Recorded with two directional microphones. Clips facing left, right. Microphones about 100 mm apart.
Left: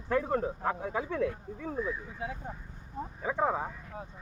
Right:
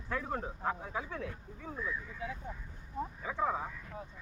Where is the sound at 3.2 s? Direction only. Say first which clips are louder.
Left 5 dB; 50° left (ahead or behind).